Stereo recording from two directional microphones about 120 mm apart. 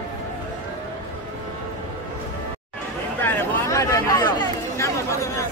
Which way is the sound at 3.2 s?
20° left (ahead or behind).